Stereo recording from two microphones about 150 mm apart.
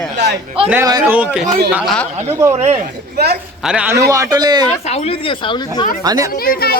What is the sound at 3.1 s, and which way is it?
Speech, 90° right.